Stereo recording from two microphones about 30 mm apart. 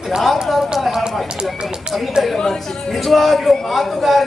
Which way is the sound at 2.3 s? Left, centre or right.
Centre.